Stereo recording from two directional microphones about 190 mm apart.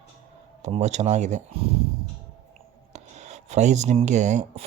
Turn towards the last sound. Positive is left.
turn(degrees=-40)  # may be behind; listen again after turning